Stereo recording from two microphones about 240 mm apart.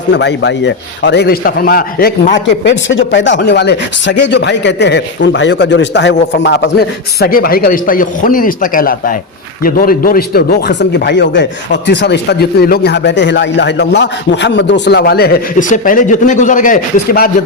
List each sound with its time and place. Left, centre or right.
0.1 s a man's voice: left